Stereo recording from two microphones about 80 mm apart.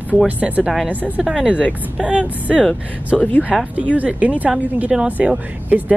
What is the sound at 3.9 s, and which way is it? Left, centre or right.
Speech, centre.